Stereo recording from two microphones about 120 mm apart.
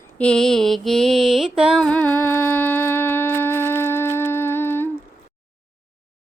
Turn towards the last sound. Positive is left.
turn(degrees=20)  # may be behind; listen again after turning